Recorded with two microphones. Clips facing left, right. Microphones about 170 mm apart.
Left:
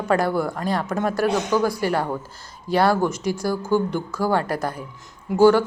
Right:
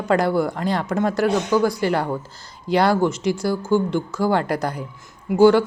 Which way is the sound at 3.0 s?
10° left (ahead or behind).